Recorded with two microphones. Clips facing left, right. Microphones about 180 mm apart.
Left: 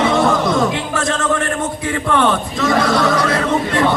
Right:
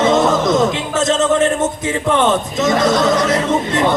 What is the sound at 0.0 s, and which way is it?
Music, 20° right (ahead or behind).